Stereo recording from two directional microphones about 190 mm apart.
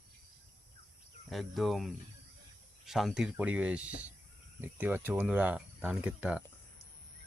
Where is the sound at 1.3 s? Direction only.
Centre (ahead or behind).